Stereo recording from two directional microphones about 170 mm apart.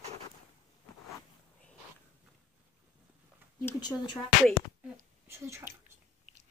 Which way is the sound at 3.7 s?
25° left (ahead or behind).